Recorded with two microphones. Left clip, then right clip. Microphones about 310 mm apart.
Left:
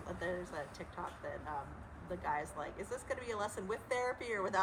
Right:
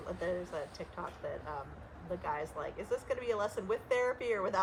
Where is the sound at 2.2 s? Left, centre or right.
Right.